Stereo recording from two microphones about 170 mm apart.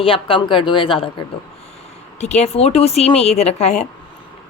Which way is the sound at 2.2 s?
40° left (ahead or behind).